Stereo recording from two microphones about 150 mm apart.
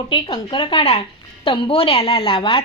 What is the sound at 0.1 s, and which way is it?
A woman's voice, 30° left (ahead or behind).